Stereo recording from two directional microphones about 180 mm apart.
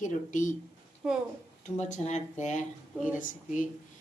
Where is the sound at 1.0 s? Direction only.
5° right (ahead or behind).